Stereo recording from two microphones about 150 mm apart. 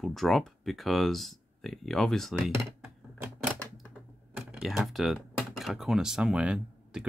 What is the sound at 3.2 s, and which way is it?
Typewriter, 10° right (ahead or behind).